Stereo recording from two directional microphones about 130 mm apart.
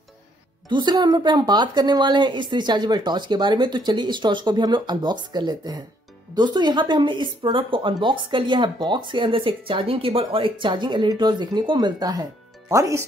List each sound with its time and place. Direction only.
0.7 s speech: 35° right (ahead or behind)